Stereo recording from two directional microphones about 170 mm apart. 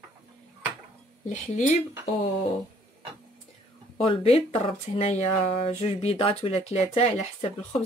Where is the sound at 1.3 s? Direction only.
45° left (ahead or behind).